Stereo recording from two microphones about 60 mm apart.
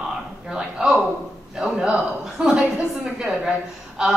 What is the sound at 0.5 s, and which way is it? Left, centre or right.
A woman's voice, centre.